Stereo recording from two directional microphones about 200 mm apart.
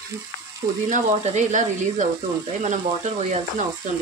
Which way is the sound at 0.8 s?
40° right (ahead or behind).